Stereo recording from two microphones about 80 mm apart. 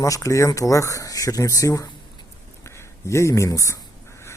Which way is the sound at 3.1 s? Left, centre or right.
Left.